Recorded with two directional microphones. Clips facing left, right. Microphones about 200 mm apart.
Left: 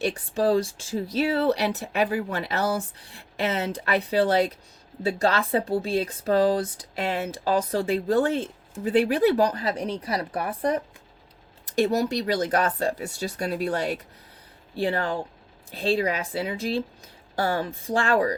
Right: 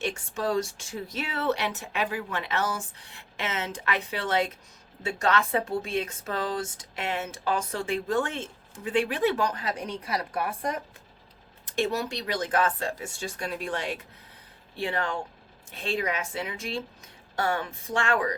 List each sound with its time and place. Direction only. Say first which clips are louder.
0.0 s speech: left 6 dB; 35° left (ahead or behind)